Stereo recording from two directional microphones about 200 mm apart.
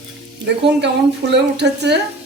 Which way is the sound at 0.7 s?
60° right (ahead or behind).